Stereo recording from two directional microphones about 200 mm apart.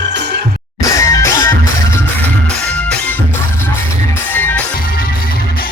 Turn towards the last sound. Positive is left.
turn(degrees=10)  # may be behind; listen again after turning